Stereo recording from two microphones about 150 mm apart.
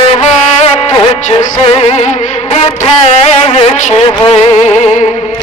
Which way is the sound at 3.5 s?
45° left (ahead or behind).